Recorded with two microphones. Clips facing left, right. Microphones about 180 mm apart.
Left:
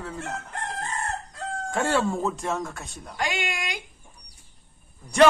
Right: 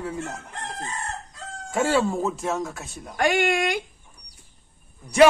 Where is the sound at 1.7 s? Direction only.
5° right (ahead or behind).